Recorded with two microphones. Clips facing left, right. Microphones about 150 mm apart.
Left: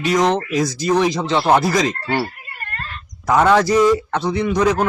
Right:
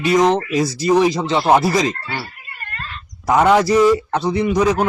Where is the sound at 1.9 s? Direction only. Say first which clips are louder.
Left 4 dB; 45° left (ahead or behind).